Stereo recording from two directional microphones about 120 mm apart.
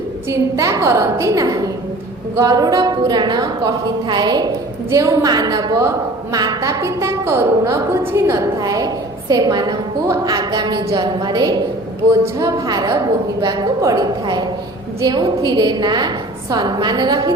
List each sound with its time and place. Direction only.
0.3 s a woman's voice: 25° right (ahead or behind)